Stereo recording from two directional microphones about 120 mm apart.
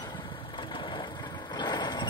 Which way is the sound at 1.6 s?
35° left (ahead or behind).